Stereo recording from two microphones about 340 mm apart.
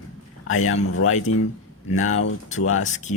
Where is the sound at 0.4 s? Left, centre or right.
Left.